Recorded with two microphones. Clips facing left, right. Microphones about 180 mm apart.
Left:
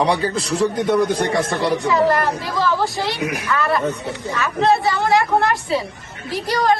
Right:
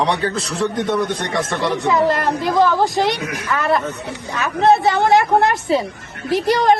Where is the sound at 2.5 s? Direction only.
20° right (ahead or behind).